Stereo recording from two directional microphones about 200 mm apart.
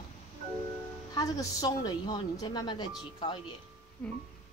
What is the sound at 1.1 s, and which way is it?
Speech, 20° left (ahead or behind).